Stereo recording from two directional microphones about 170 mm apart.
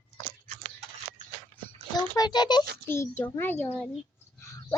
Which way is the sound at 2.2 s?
25° left (ahead or behind).